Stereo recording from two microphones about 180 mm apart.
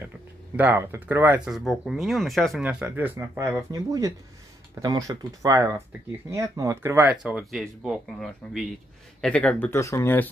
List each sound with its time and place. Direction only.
0.6 s speech: 10° right (ahead or behind)
3.2 s speech: 20° right (ahead or behind); by 10.3 s 10° left (ahead or behind)